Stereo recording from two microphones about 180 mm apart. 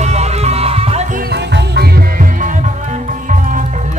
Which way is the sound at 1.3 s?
70° right (ahead or behind).